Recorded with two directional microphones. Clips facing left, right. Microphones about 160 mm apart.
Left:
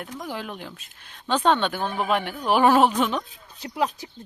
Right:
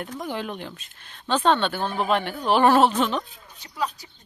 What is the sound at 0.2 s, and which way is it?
Speech, centre (ahead or behind).